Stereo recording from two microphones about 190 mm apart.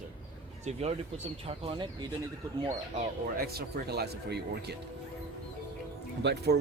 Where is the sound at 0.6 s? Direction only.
35° right (ahead or behind).